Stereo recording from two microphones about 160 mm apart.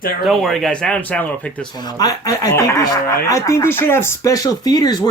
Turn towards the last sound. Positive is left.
turn(degrees=25)  # may be behind; listen again after turning